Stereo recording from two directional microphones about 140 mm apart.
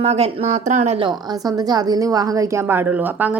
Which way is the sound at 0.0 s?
50° right (ahead or behind).